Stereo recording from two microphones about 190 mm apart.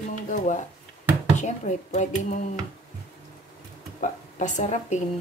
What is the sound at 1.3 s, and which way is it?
Speech, 40° left (ahead or behind).